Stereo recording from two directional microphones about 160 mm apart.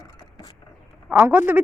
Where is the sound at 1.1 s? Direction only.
15° right (ahead or behind).